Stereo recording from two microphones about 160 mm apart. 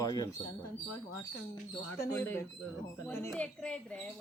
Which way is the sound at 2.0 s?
15° left (ahead or behind).